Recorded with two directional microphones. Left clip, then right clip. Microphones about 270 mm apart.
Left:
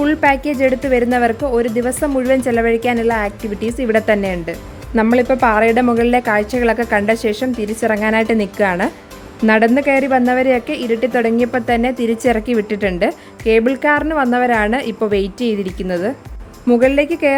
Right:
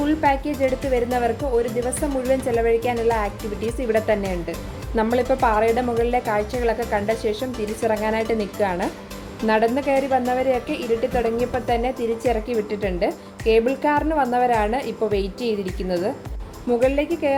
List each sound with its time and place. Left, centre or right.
0.0 s speech: left